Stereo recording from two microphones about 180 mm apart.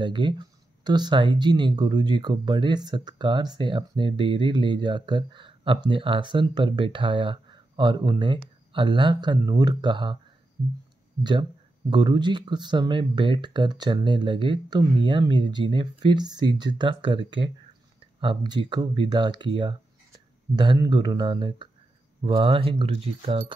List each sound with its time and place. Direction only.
0.0 s speech: 25° right (ahead or behind)
11.9 s speech: 25° right (ahead or behind)